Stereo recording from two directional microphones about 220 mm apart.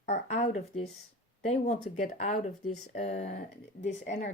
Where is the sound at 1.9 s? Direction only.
35° left (ahead or behind).